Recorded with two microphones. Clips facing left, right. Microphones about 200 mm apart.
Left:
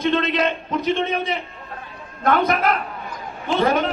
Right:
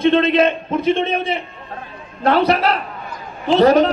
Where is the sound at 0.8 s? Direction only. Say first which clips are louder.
Right 4 dB; 55° right (ahead or behind).